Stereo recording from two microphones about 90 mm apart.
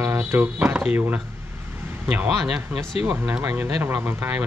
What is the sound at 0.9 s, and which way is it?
Speech, 20° right (ahead or behind).